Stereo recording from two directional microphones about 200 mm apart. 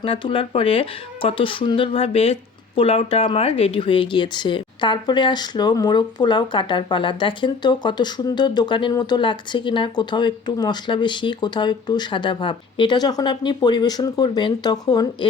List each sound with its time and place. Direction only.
0.0 s speech: 25° left (ahead or behind)